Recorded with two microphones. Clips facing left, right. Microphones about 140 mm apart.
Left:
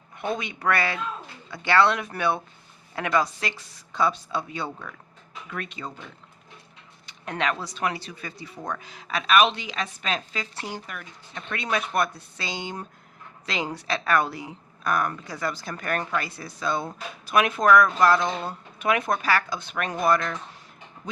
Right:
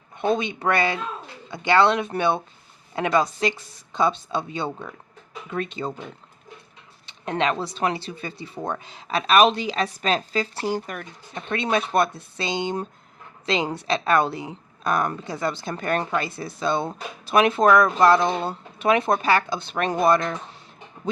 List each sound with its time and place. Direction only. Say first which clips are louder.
0.2 s a woman's voice: right 6 dB; 25° right (ahead or behind); by 11.0 s 45° right (ahead or behind)
11.3 s a woman's voice: right 5 dB; 25° right (ahead or behind)